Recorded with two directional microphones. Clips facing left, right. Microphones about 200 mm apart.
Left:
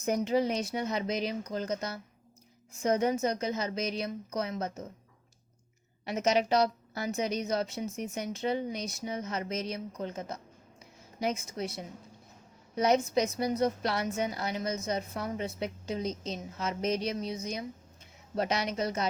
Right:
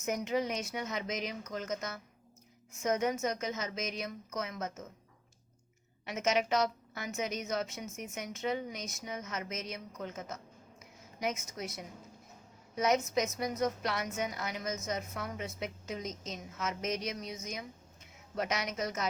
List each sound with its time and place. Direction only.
0.0 s a woman's voice: 35° left (ahead or behind)
6.1 s a woman's voice: 35° left (ahead or behind)